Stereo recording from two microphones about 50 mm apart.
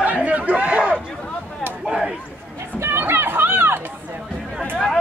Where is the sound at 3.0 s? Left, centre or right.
Right.